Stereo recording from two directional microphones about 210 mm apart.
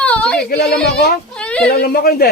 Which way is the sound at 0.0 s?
5° left (ahead or behind).